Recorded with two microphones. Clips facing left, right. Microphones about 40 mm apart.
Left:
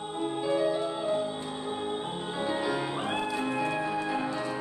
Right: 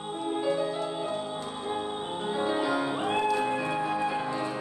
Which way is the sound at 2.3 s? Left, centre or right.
Centre.